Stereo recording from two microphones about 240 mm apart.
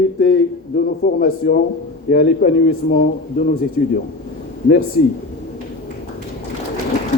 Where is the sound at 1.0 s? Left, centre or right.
Left.